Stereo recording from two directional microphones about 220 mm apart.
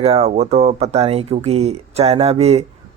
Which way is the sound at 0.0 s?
25° right (ahead or behind).